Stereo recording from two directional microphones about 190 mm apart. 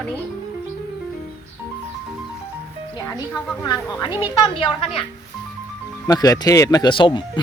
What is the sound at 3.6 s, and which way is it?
Speech, 20° left (ahead or behind).